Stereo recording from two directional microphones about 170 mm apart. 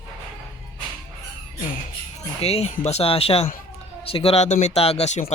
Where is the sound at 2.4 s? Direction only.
35° left (ahead or behind).